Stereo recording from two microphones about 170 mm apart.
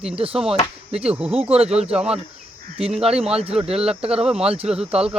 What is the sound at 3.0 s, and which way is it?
Speech, 35° right (ahead or behind).